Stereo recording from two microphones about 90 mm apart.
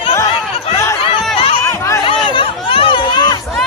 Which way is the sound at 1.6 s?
35° left (ahead or behind).